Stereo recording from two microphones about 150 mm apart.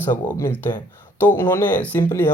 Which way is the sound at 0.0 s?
15° left (ahead or behind).